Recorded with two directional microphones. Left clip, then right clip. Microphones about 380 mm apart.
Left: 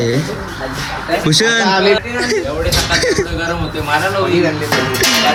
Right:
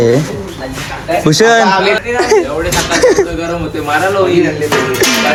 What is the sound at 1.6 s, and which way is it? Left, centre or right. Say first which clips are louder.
Speech: right 2 dB; centre.